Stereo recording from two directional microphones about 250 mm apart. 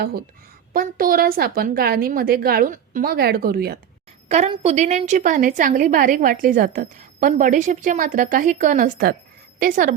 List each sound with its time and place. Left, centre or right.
0.7 s a woman's voice: right
4.3 s a woman's voice: right